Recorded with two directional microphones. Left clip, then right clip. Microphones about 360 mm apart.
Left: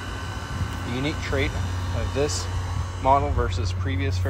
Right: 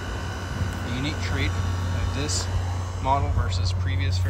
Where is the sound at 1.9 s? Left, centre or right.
Right.